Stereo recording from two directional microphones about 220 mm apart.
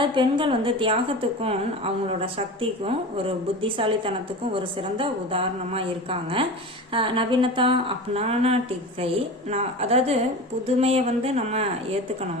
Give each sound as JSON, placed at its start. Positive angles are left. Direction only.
{"t": 0.0, "sound": "a woman's voice", "side_deg": -20}